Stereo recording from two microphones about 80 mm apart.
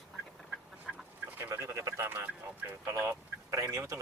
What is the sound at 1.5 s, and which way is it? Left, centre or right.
Speech, right.